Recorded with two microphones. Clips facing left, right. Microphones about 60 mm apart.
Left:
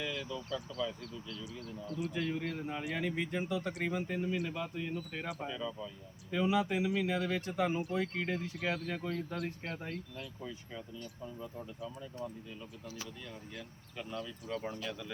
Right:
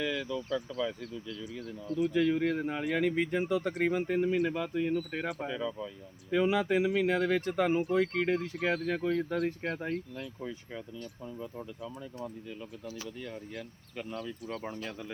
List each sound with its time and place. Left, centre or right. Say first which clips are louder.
0.2 s speech: right 6 dB; right
2.0 s speech: right 9 dB; right
9.6 s speech: right 7 dB; right
13.2 s speech: right 6 dB; right
14.6 s speech: right 1 dB; right